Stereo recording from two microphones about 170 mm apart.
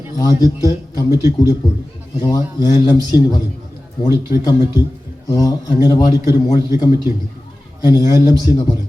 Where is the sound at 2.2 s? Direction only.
20° left (ahead or behind).